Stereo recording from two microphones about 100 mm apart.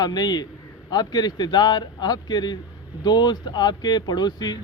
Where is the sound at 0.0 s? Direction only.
45° left (ahead or behind).